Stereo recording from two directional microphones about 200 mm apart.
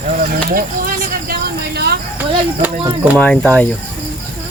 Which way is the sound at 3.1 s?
5° left (ahead or behind).